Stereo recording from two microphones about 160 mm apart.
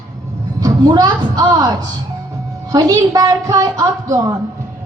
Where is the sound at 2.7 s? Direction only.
20° right (ahead or behind).